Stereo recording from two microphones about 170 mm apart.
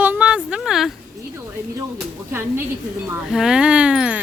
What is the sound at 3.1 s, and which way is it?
Speech, 5° right (ahead or behind).